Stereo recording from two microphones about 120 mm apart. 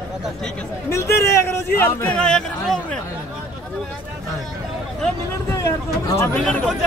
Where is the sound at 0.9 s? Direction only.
25° left (ahead or behind).